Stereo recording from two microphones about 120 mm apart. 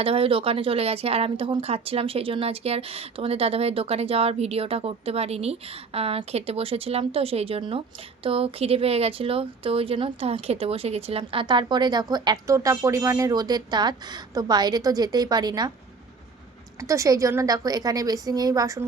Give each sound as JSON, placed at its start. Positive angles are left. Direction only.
{"t": 0.0, "sound": "speech", "side_deg": -50}
{"t": 16.8, "sound": "a woman's voice", "side_deg": -25}